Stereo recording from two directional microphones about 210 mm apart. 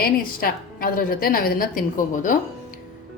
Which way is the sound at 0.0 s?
45° left (ahead or behind).